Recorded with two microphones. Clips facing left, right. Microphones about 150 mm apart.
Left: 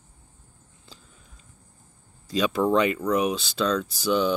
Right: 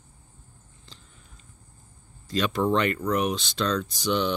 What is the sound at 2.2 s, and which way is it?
Speech, 10° left (ahead or behind).